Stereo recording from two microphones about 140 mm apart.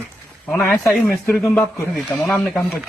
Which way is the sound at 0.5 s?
15° left (ahead or behind).